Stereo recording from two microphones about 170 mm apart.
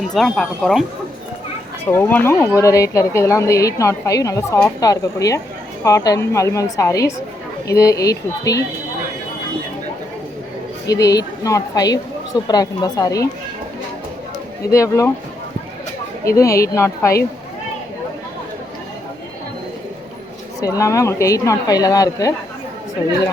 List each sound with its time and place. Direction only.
0.1 s speech: centre (ahead or behind)
1.9 s a woman's voice: 10° left (ahead or behind)
10.8 s a woman's voice: 20° left (ahead or behind)
14.7 s speech: 15° left (ahead or behind)
16.2 s speech: 20° left (ahead or behind)
20.6 s a woman's voice: 20° left (ahead or behind)